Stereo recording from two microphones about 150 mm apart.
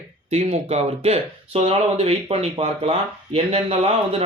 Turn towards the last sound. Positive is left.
turn(degrees=-40)  # may be behind; listen again after turning